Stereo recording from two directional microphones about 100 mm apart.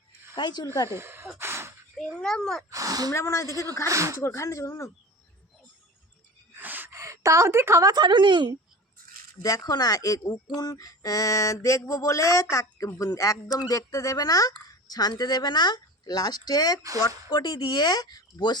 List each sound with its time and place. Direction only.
0.3 s speech: 45° left (ahead or behind)
0.9 s speech: 25° right (ahead or behind)
1.4 s gasp: 25° right (ahead or behind)
2.1 s a child's voice: 5° left (ahead or behind)
2.6 s speech: 35° right (ahead or behind)
3.1 s speech: 30° left (ahead or behind)
3.8 s speech: 30° right (ahead or behind)
4.2 s speech: 30° left (ahead or behind)
6.6 s a sound: 20° right (ahead or behind)
7.0 s a woman's voice: 30° right (ahead or behind)
7.9 s a woman's voice: 45° right (ahead or behind)
9.4 s speech: 40° left (ahead or behind)